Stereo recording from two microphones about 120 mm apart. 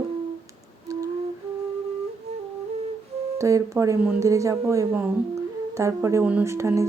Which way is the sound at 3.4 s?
25° right (ahead or behind).